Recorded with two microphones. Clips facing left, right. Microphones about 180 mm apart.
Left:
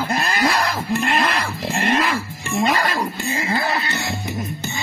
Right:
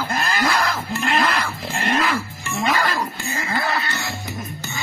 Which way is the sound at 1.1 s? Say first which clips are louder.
Even; 25° left (ahead or behind).